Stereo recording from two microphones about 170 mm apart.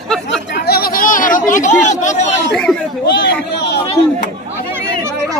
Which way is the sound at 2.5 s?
5° left (ahead or behind).